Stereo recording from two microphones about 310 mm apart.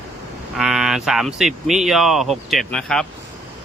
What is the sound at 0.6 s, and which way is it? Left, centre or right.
Speech, centre.